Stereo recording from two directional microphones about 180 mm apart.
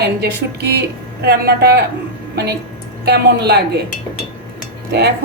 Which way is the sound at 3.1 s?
65° right (ahead or behind).